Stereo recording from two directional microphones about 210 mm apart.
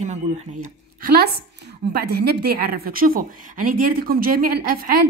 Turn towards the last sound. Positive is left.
turn(degrees=-45)  # may be behind; listen again after turning